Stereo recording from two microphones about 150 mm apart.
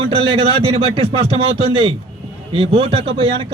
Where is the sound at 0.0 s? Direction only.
35° right (ahead or behind).